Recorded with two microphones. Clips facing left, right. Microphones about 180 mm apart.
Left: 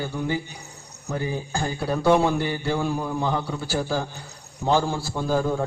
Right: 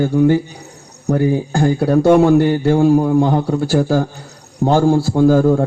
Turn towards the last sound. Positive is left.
turn(degrees=-55)  # may be behind; listen again after turning